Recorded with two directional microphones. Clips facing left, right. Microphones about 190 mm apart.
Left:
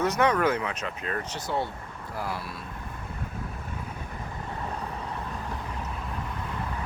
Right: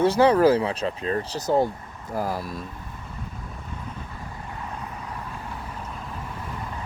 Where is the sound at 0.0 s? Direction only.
30° right (ahead or behind).